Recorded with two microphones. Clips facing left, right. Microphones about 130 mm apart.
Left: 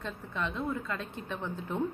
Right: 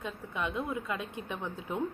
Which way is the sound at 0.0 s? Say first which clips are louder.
Even; 15° right (ahead or behind).